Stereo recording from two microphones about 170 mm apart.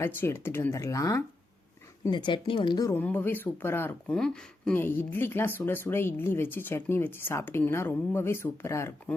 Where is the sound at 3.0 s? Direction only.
10° left (ahead or behind).